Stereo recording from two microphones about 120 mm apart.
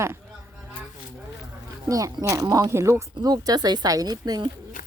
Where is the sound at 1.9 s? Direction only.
30° right (ahead or behind).